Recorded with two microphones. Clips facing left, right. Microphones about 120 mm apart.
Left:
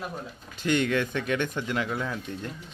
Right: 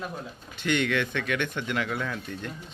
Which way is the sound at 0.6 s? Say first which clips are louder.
Left 1 dB; 35° left (ahead or behind).